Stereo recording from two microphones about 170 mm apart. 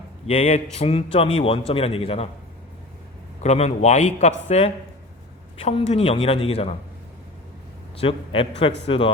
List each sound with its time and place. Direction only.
0.3 s a man's voice: 40° left (ahead or behind)
3.4 s a man's voice: 40° left (ahead or behind)
7.9 s a man's voice: 35° left (ahead or behind)